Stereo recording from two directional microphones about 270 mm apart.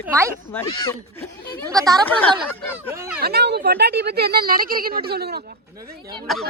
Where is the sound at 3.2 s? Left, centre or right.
Right.